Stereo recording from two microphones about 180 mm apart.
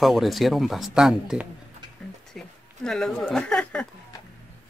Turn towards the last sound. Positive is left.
turn(degrees=5)  # may be behind; listen again after turning